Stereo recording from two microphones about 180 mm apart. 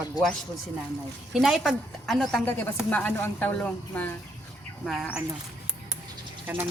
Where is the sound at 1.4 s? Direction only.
Centre (ahead or behind).